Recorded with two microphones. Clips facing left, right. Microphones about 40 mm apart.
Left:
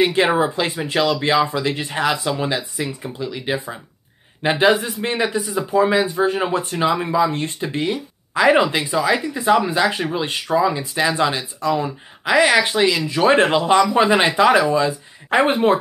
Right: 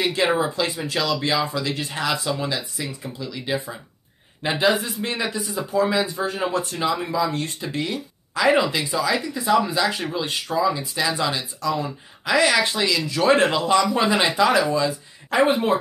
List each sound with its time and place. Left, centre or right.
0.0 s speech: left